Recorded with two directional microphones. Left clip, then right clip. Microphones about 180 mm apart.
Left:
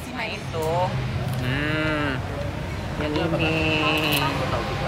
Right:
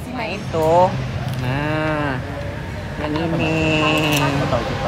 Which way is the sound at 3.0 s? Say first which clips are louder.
Right 3 dB; centre (ahead or behind).